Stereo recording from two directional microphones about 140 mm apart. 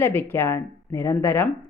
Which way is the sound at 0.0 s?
15° left (ahead or behind).